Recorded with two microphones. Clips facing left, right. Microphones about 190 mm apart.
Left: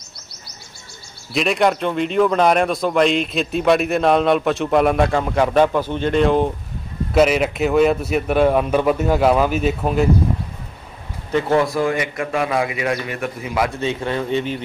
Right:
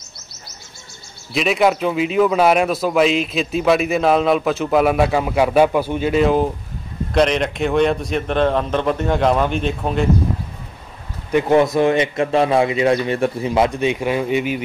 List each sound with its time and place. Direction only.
1.3 s a man's voice: centre (ahead or behind)
11.3 s a man's voice: 20° right (ahead or behind)
13.7 s speech: 15° right (ahead or behind)